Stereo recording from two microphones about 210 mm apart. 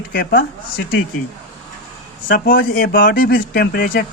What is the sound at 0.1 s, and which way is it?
Speech, 45° left (ahead or behind).